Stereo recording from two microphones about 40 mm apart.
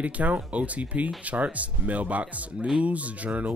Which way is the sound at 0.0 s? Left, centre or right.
Right.